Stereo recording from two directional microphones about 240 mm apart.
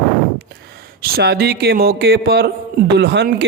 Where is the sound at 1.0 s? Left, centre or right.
Right.